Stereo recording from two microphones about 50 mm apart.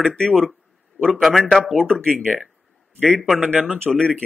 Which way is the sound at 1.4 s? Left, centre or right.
Centre.